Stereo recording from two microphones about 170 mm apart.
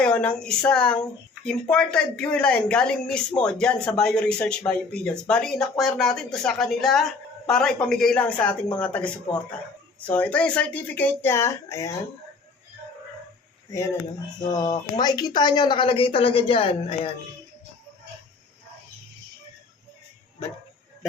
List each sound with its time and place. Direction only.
0.0 s speech: 5° left (ahead or behind)
14.4 s speech: 25° left (ahead or behind)